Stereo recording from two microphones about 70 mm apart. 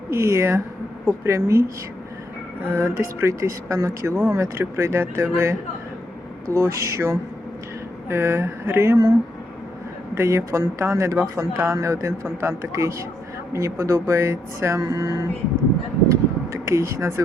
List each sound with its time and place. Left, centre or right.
0.1 s speech: right
2.7 s speech: right
10.2 s speech: right
16.0 s a sound: right